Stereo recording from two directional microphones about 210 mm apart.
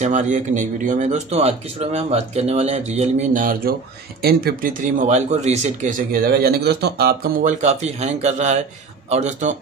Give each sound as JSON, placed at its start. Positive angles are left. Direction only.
{"t": 0.0, "sound": "speech", "side_deg": -35}